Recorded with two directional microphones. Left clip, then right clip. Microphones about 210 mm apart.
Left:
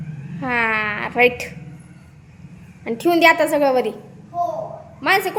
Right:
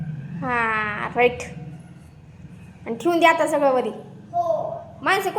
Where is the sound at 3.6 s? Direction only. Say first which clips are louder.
Even; 35° left (ahead or behind).